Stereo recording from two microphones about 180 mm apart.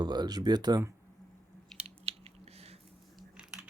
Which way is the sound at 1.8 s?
35° right (ahead or behind).